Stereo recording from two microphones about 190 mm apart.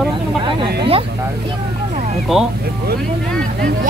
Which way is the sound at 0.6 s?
30° right (ahead or behind).